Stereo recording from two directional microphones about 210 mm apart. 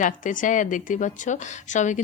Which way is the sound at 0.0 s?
40° left (ahead or behind).